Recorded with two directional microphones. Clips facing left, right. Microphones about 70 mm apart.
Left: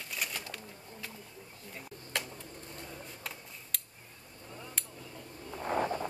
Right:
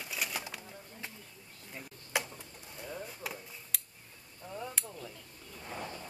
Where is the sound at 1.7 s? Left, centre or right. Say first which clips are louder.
Right 3 dB; centre.